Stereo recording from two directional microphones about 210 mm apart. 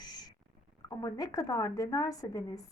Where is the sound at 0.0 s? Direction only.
20° left (ahead or behind).